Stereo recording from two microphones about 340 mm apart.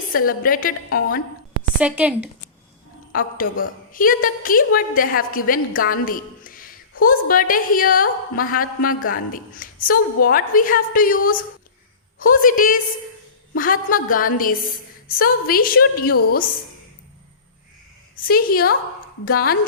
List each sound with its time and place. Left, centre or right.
0.2 s a woman's voice: left
1.8 s a woman's voice: centre
3.1 s a woman's voice: left
18.3 s a woman's voice: left